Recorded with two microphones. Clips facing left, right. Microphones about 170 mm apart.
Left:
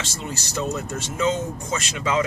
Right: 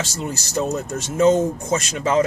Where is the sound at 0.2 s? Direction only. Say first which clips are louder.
Right 4 dB; 45° right (ahead or behind).